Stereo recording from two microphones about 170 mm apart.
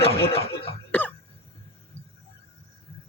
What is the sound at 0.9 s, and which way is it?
Cough, 10° left (ahead or behind).